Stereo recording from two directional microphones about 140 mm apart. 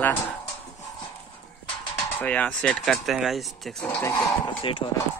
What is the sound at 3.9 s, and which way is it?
Speech, 20° left (ahead or behind).